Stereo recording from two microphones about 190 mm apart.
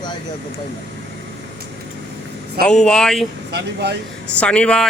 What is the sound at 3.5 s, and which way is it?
Speech, 60° right (ahead or behind).